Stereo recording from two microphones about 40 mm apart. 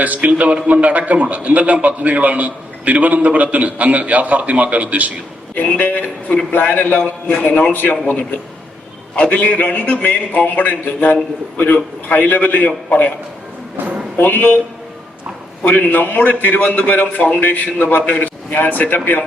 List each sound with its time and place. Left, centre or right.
0.0 s a man's voice: right
5.5 s speech: left
6.5 s a man's voice: left
7.4 s a man's voice: left
7.7 s speech: left
9.1 s a man's voice: left
14.2 s a man's voice: left
15.6 s speech: left